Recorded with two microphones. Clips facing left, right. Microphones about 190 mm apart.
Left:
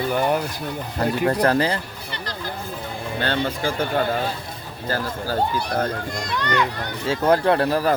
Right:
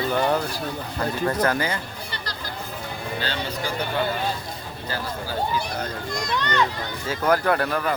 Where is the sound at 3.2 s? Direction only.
55° left (ahead or behind).